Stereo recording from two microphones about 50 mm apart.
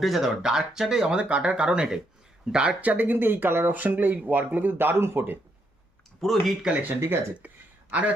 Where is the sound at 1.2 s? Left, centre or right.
Right.